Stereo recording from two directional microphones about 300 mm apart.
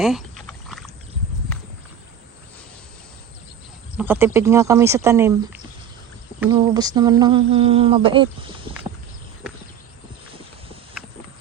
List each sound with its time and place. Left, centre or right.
0.0 s rowboat: centre
3.9 s speech: centre